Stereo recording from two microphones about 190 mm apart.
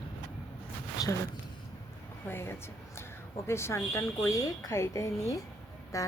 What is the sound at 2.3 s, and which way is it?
A woman's voice, 10° left (ahead or behind).